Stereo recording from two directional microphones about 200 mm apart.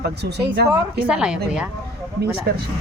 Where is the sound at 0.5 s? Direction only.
55° right (ahead or behind).